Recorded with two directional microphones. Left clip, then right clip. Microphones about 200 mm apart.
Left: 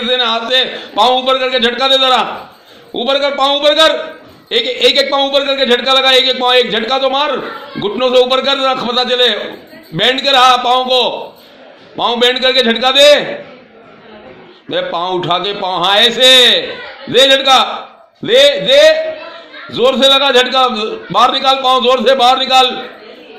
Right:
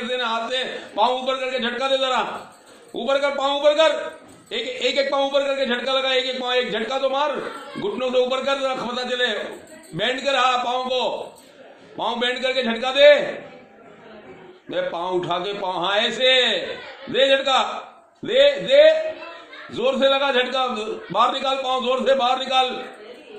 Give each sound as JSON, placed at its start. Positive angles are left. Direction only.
{"t": 0.0, "sound": "a man's voice", "side_deg": 50}
{"t": 14.7, "sound": "a man's voice", "side_deg": 45}